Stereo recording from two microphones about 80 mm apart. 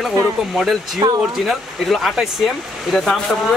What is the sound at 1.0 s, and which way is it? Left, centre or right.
Speech, right.